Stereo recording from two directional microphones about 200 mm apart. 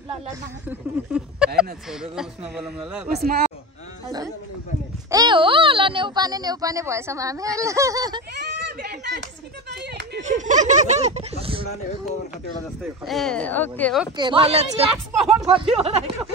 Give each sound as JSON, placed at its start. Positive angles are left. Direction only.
{"t": 0.3, "sound": "speech", "side_deg": -5}
{"t": 3.2, "sound": "a man's voice", "side_deg": -45}
{"t": 5.1, "sound": "speech", "side_deg": -25}
{"t": 8.3, "sound": "children playing", "side_deg": -55}
{"t": 9.8, "sound": "a sound", "side_deg": -55}
{"t": 10.2, "sound": "speech", "side_deg": -35}
{"t": 13.0, "sound": "speech", "side_deg": 0}
{"t": 14.1, "sound": "speech", "side_deg": -25}